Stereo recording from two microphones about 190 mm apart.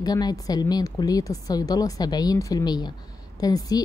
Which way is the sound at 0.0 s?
20° left (ahead or behind).